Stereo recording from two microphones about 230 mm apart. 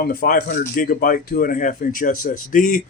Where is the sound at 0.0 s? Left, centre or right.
Left.